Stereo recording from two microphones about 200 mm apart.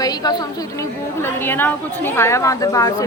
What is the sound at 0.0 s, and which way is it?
A woman's voice, 20° left (ahead or behind).